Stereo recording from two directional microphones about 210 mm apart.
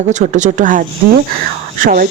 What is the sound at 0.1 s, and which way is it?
Speech, 35° right (ahead or behind).